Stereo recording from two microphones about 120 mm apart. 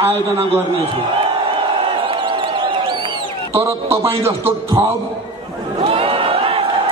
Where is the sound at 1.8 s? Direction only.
45° right (ahead or behind).